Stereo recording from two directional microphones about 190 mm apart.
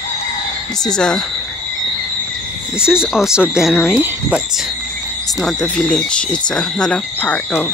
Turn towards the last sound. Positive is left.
turn(degrees=10)  # may be behind; listen again after turning